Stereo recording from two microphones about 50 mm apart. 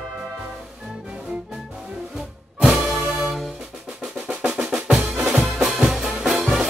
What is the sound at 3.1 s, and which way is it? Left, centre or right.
Music, centre.